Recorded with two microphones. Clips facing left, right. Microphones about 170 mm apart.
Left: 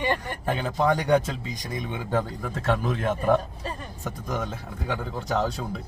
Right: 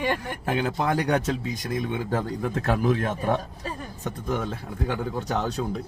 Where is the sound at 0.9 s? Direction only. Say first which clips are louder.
Left 1 dB; 5° right (ahead or behind).